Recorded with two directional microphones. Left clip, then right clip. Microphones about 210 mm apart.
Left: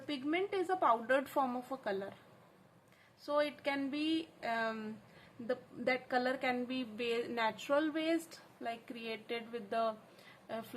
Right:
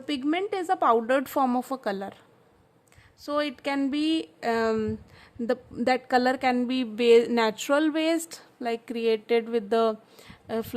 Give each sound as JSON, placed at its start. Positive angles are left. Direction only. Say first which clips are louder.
{"t": 0.1, "sound": "a woman's voice", "louder": "right 9 dB", "side_deg": -50}
{"t": 3.2, "sound": "a woman's voice", "louder": "right 6 dB", "side_deg": -50}